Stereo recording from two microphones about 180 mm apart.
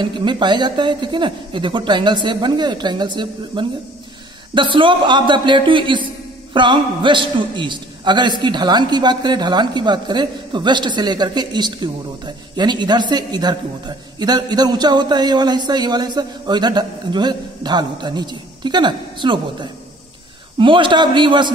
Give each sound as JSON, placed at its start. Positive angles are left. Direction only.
{"t": 0.0, "sound": "a man's voice", "side_deg": -25}